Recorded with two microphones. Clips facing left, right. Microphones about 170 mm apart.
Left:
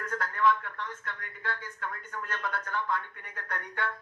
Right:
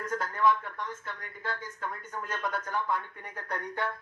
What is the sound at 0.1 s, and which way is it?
Speech, 15° right (ahead or behind).